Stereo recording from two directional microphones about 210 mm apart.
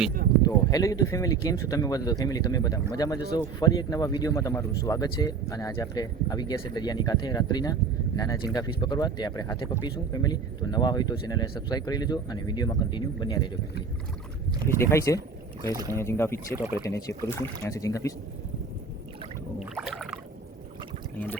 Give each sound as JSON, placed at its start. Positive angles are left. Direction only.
{"t": 0.4, "sound": "speech", "side_deg": 15}
{"t": 14.8, "sound": "speech", "side_deg": 15}
{"t": 15.7, "sound": "speech", "side_deg": -15}
{"t": 16.0, "sound": "speech", "side_deg": 10}
{"t": 19.5, "sound": "rowboat", "side_deg": 0}